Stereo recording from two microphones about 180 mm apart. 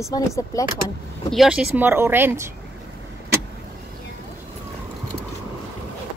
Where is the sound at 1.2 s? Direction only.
Centre (ahead or behind).